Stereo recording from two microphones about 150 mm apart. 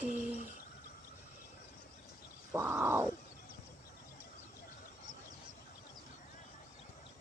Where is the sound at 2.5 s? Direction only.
15° right (ahead or behind).